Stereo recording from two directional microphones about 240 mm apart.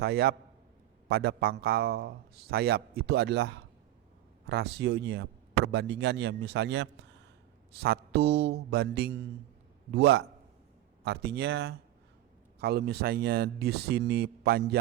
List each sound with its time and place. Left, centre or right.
0.0 s a man's voice: right